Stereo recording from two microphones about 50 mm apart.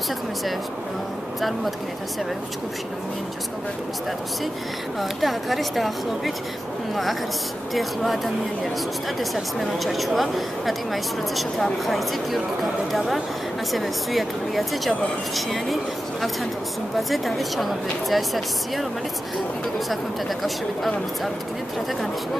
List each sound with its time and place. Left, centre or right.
5.0 s a woman's voice: centre
7.7 s a woman's voice: centre
9.2 s a woman's voice: centre
20.4 s a woman's voice: centre